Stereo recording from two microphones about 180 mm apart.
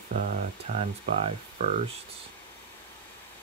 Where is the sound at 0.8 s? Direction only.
35° right (ahead or behind).